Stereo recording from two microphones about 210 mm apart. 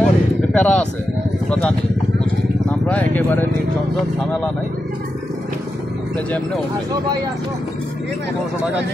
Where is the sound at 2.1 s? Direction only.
5° left (ahead or behind).